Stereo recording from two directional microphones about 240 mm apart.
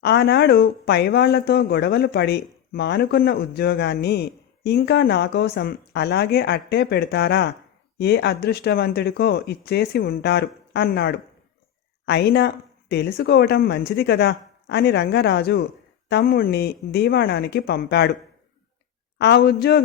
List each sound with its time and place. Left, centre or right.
0.0 s speech: left
19.2 s speech: left